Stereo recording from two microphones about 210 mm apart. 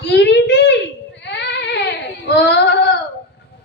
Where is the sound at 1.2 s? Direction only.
55° left (ahead or behind).